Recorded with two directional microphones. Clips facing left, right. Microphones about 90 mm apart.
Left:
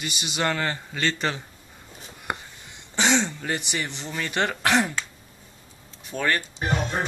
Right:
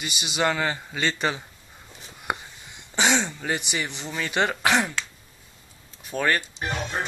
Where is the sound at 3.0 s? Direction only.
5° right (ahead or behind).